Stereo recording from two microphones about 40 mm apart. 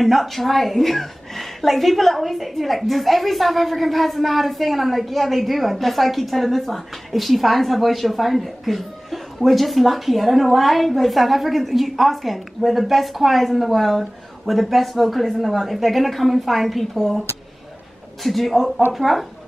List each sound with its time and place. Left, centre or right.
0.0 s a woman's voice: centre
18.2 s a woman's voice: centre